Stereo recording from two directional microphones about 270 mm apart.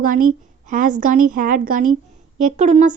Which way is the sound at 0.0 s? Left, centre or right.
Right.